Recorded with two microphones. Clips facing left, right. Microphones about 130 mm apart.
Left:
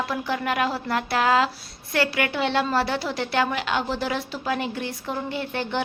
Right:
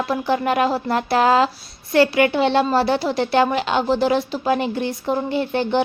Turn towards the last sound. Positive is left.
turn(degrees=-25)  # may be behind; listen again after turning